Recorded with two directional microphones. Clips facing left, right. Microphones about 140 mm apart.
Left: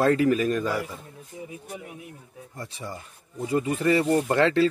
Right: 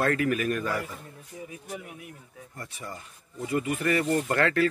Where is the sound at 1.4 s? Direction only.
25° left (ahead or behind).